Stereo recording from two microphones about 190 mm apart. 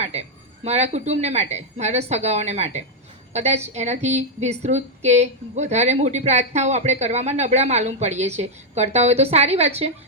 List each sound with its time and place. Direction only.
0.0 s a woman's voice: 35° right (ahead or behind)